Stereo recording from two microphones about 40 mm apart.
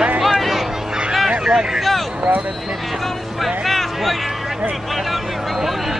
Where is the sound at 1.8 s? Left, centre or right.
Centre.